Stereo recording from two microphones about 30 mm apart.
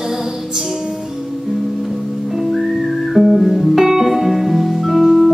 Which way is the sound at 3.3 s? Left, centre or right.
Centre.